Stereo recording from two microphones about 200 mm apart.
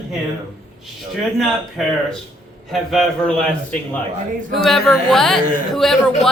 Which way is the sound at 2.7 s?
Centre (ahead or behind).